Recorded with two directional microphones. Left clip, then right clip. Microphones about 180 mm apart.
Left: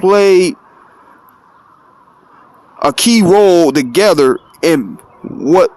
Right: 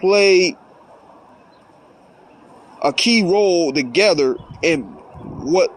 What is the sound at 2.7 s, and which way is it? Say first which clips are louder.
A man's voice: left 4 dB; 40° left (ahead or behind).